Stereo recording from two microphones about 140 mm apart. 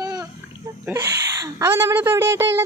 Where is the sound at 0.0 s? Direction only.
25° right (ahead or behind).